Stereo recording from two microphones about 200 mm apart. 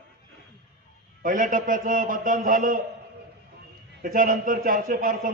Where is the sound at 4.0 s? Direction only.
45° right (ahead or behind).